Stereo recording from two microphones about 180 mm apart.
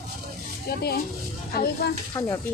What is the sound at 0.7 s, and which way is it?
Speech, 60° left (ahead or behind).